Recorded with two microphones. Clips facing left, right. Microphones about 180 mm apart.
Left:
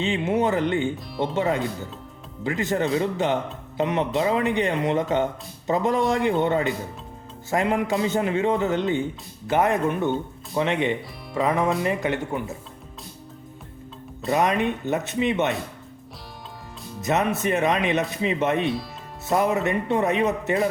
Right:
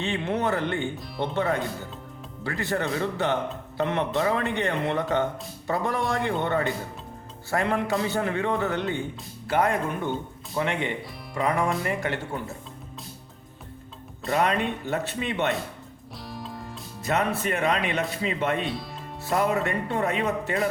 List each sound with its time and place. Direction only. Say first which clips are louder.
0.0 s speech: left 4 dB; 15° left (ahead or behind)
0.9 s speech: left 3 dB; centre (ahead or behind)
1.4 s a man's voice: left 2 dB; 20° left (ahead or behind)
14.3 s a man's voice: left 3 dB; 20° left (ahead or behind)
17.0 s a man's voice: left 3 dB; 20° left (ahead or behind)